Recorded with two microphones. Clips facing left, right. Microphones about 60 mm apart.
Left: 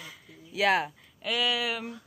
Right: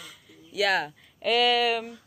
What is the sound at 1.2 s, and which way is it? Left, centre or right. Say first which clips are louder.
Speech: right 7 dB; right.